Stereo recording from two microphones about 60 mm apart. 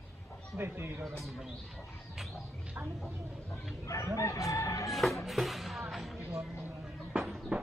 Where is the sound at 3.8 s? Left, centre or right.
Left.